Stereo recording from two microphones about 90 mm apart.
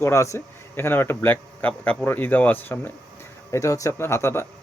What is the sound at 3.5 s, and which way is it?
Speech, 35° left (ahead or behind).